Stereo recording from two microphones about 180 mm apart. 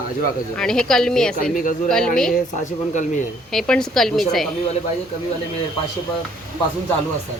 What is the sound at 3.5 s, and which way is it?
Speech, 5° left (ahead or behind).